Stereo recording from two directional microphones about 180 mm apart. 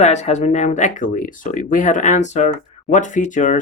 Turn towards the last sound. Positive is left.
turn(degrees=45)  # may be behind; listen again after turning